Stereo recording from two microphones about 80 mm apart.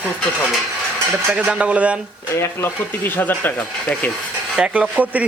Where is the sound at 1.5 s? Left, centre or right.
Centre.